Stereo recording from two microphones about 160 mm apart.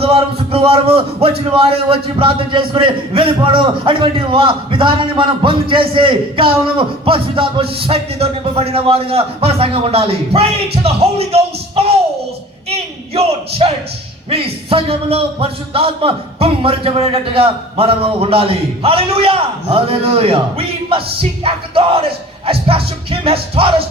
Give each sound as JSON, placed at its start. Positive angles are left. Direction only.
{"t": 0.0, "sound": "a man's voice", "side_deg": -35}
{"t": 12.7, "sound": "a man's voice", "side_deg": -40}